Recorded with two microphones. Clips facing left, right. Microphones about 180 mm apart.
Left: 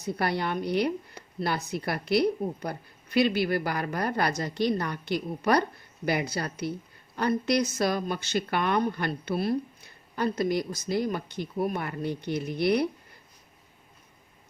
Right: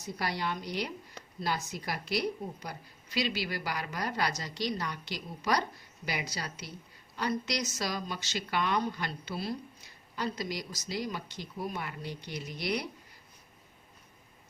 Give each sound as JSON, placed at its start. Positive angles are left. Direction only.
{"t": 0.0, "sound": "speech", "side_deg": 60}